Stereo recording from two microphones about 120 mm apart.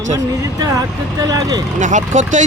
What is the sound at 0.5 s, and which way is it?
Speech, 30° right (ahead or behind).